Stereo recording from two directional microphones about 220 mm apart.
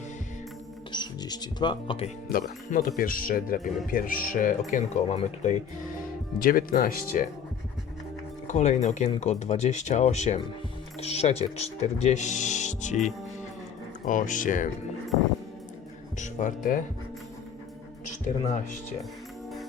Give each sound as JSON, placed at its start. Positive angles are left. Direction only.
{"t": 0.9, "sound": "speech", "side_deg": 20}
{"t": 2.3, "sound": "speech", "side_deg": 40}
{"t": 6.4, "sound": "speech", "side_deg": 40}
{"t": 8.4, "sound": "speech", "side_deg": 30}
{"t": 14.0, "sound": "speech", "side_deg": 35}
{"t": 16.1, "sound": "speech", "side_deg": 35}
{"t": 18.4, "sound": "speech", "side_deg": 35}